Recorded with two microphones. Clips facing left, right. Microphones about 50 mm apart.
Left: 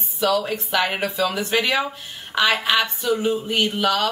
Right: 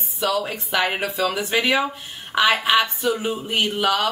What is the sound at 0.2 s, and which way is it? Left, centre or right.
Speech, centre.